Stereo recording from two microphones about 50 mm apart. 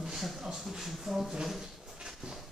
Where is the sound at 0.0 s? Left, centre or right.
Centre.